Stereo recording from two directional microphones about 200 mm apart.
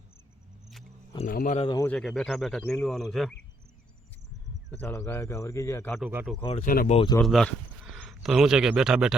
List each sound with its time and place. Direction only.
1.3 s speech: 45° left (ahead or behind)
1.5 s speech: 25° left (ahead or behind)
1.8 s speech: 5° left (ahead or behind)
4.7 s speech: 10° left (ahead or behind)
6.0 s speech: 5° right (ahead or behind)
6.4 s speech: 30° left (ahead or behind)
6.7 s speech: 45° left (ahead or behind)
6.9 s speech: 25° left (ahead or behind)
7.2 s speech: centre (ahead or behind)